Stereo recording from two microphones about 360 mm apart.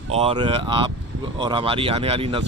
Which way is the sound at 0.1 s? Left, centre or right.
Centre.